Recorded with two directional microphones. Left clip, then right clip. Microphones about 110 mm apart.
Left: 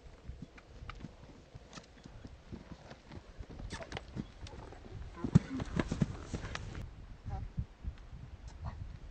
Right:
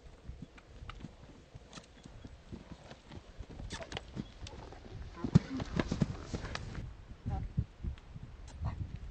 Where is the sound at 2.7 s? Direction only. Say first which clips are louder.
Even; 5° right (ahead or behind).